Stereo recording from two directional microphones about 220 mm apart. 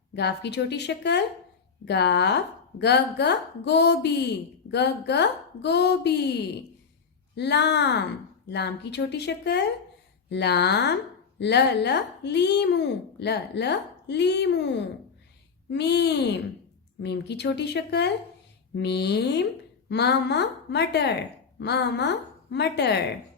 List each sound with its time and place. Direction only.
0.2 s speech: 50° left (ahead or behind)
7.3 s speech: 50° left (ahead or behind)